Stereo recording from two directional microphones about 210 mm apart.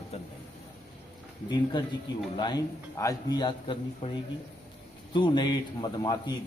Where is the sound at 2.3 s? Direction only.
20° left (ahead or behind).